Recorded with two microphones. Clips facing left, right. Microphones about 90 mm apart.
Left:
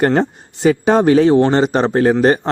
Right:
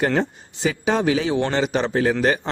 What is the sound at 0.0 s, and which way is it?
Speech, 45° left (ahead or behind).